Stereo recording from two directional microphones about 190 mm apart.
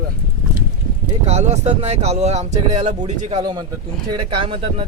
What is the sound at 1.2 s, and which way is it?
Speech, 35° right (ahead or behind).